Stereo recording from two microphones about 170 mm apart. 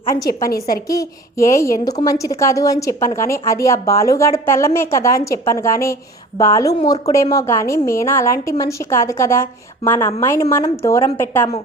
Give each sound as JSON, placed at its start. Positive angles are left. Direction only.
{"t": 0.4, "sound": "a woman's voice", "side_deg": 55}
{"t": 0.9, "sound": "a woman's voice", "side_deg": 20}